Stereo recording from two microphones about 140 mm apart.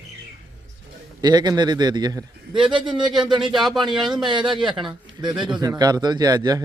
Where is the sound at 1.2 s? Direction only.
30° right (ahead or behind).